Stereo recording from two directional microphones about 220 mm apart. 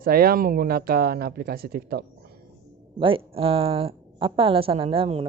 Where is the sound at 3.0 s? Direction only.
25° right (ahead or behind).